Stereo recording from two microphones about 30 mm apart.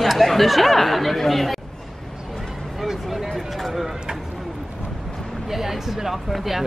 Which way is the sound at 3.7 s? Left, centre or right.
Centre.